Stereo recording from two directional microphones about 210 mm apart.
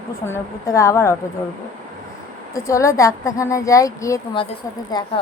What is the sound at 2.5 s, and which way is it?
A woman's voice, 15° left (ahead or behind).